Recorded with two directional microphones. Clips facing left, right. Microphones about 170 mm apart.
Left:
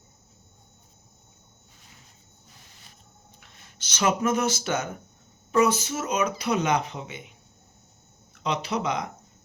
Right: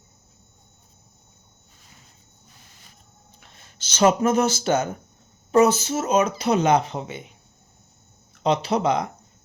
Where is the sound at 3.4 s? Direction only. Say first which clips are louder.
Right 4 dB; 30° right (ahead or behind).